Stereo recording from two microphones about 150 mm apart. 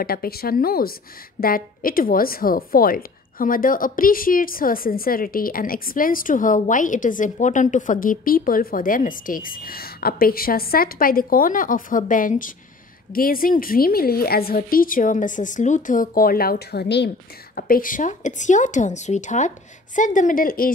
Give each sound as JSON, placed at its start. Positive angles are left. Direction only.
{"t": 0.0, "sound": "a woman's voice", "side_deg": 90}
{"t": 17.6, "sound": "a woman's voice", "side_deg": 75}